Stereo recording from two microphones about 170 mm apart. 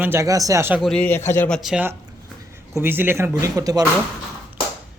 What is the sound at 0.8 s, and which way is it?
Speech, 5° left (ahead or behind).